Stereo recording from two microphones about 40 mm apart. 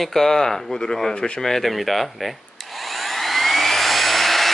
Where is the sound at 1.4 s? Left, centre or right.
Centre.